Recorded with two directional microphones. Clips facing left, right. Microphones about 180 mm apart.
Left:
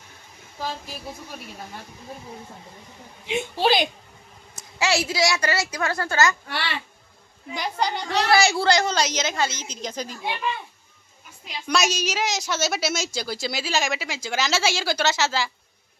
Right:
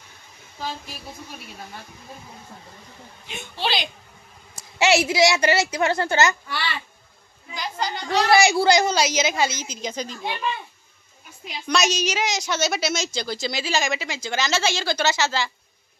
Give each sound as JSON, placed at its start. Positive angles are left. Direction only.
{"t": 3.5, "sound": "speech", "side_deg": 45}
{"t": 4.6, "sound": "a woman's voice", "side_deg": -25}
{"t": 7.5, "sound": "a woman's voice", "side_deg": 65}
{"t": 8.1, "sound": "a woman's voice", "side_deg": -15}
{"t": 11.6, "sound": "a woman's voice", "side_deg": 5}